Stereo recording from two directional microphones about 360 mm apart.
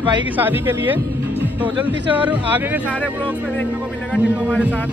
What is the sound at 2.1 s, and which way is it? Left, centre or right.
Speech, centre.